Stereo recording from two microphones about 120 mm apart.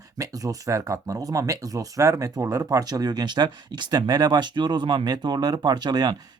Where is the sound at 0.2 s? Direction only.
30° right (ahead or behind).